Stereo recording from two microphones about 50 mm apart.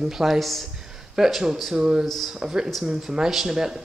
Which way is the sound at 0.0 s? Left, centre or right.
Centre.